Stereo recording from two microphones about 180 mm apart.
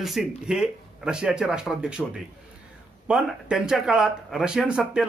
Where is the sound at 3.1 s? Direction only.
5° right (ahead or behind).